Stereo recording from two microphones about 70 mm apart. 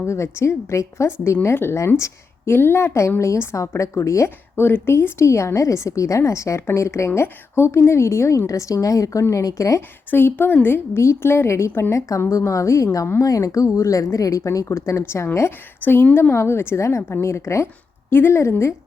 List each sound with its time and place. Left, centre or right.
0.0 s a woman's voice: left
4.6 s a woman's voice: left
10.1 s a woman's voice: left